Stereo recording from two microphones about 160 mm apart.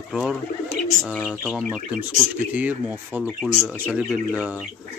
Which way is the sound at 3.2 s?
5° left (ahead or behind).